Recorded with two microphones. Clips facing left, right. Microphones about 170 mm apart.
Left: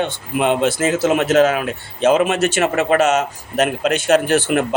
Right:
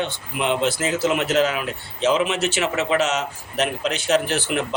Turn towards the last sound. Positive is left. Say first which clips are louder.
# left 7 dB
turn(degrees=50)  # may be behind; listen again after turning